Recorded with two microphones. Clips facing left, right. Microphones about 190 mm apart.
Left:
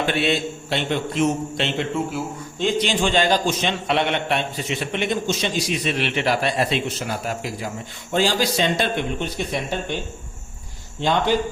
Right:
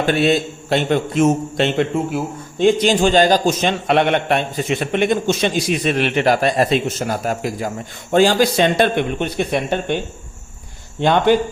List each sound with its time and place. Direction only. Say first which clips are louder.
0.0 s a man's voice: right 5 dB; 45° right (ahead or behind); by 10.0 s 60° right (ahead or behind)
11.0 s a man's voice: right 6 dB; 60° right (ahead or behind)